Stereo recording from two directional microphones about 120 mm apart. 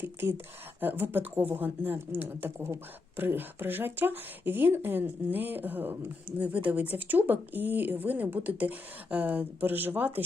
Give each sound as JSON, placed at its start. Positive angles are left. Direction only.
{"t": 0.0, "sound": "speech", "side_deg": -20}